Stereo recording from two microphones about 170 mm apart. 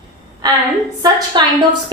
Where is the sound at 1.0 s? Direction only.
20° right (ahead or behind).